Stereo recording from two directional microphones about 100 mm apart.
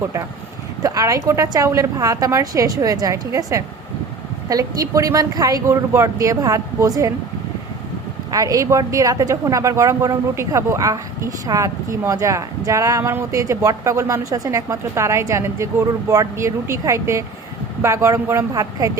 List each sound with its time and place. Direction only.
0.8 s speech: 35° right (ahead or behind)
8.3 s a woman's voice: 35° right (ahead or behind)